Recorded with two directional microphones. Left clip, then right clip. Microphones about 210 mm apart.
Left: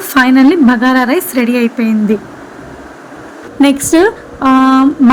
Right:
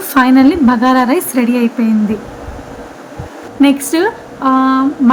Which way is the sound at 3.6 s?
20° left (ahead or behind).